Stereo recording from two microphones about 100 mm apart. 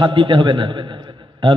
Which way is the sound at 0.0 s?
50° right (ahead or behind).